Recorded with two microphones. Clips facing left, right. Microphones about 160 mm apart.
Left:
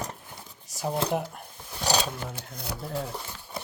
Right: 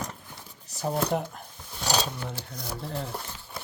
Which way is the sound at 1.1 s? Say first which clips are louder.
Even; 5° left (ahead or behind).